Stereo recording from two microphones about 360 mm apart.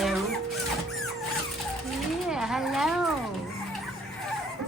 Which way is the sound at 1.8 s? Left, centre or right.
Centre.